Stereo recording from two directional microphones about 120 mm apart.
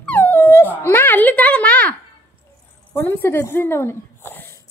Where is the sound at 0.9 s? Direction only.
15° left (ahead or behind).